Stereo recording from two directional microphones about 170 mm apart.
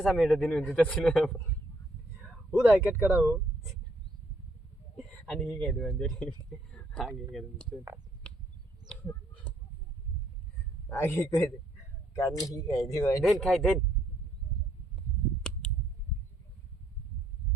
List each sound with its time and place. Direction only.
0.0 s a man's voice: centre (ahead or behind)
2.5 s speech: 10° right (ahead or behind)
4.9 s speech: 5° left (ahead or behind)
10.8 s a man's voice: 15° left (ahead or behind)
13.2 s a man's voice: centre (ahead or behind)